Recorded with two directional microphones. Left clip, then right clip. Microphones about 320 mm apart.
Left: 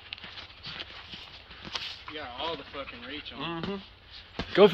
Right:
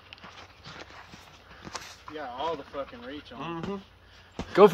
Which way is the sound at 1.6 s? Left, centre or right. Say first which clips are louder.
Left 4 dB; centre.